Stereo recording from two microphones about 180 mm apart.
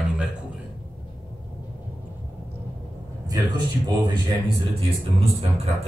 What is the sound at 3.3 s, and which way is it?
Speech, 25° right (ahead or behind).